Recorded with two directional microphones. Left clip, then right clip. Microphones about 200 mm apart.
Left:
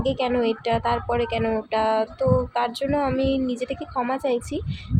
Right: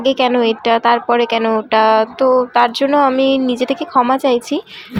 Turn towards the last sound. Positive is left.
turn(degrees=-10)  # may be behind; listen again after turning